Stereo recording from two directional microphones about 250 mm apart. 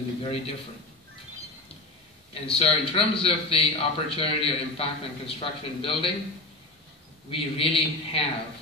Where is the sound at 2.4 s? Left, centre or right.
Left.